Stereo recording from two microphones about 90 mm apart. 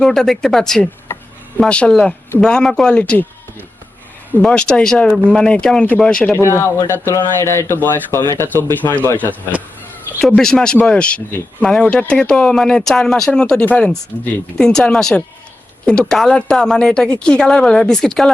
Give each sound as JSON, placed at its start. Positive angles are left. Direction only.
{"t": 0.0, "sound": "speech", "side_deg": 5}
{"t": 4.4, "sound": "speech", "side_deg": 10}
{"t": 6.3, "sound": "speech", "side_deg": 30}
{"t": 10.2, "sound": "speech", "side_deg": 5}
{"t": 14.1, "sound": "speech", "side_deg": 30}
{"t": 14.6, "sound": "speech", "side_deg": 5}